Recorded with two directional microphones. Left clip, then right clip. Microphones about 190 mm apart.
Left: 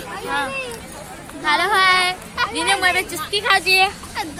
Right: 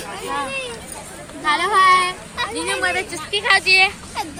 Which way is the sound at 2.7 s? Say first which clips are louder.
Left 3 dB; 55° left (ahead or behind).